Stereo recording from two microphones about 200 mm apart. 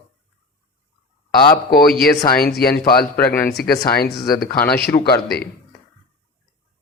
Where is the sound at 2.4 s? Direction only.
50° left (ahead or behind).